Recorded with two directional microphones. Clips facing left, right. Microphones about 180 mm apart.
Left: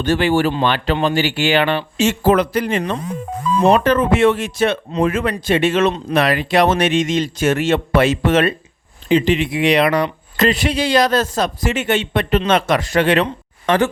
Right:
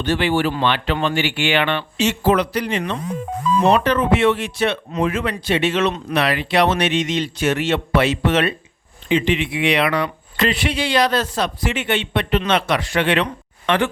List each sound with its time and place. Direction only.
0.0 s speech: 45° left (ahead or behind)